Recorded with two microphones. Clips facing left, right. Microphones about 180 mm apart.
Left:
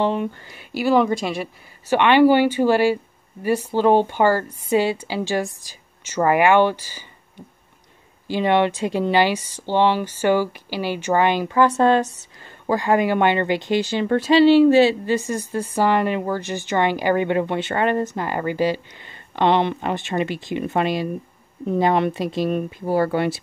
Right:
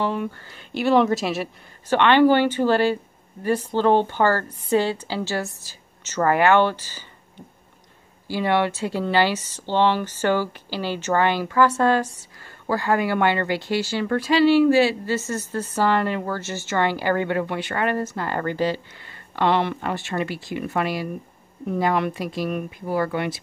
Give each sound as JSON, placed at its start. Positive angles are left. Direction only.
{"t": 0.0, "sound": "speech", "side_deg": 20}
{"t": 1.9, "sound": "a woman's voice", "side_deg": 10}
{"t": 8.3, "sound": "speech", "side_deg": 20}